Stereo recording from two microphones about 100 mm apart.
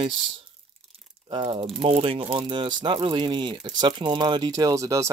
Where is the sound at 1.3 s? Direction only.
55° right (ahead or behind).